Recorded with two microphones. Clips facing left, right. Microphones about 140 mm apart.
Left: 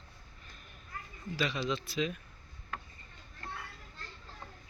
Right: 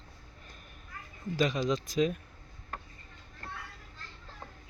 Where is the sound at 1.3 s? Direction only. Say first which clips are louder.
Right 5 dB; 45° right (ahead or behind).